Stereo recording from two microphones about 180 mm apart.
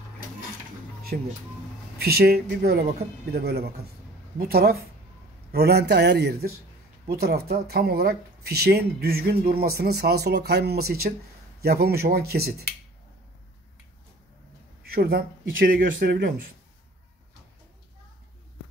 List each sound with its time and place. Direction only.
1.1 s speech: 55° right (ahead or behind)
14.8 s speech: 60° right (ahead or behind)